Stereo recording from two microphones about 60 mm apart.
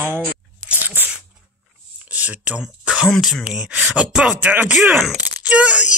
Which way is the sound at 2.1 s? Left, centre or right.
Right.